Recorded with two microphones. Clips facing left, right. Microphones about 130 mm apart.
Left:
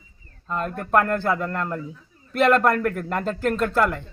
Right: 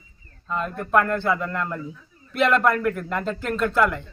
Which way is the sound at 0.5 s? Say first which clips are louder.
Even; 45° left (ahead or behind).